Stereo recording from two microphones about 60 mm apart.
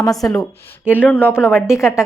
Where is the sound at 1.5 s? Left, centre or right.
Centre.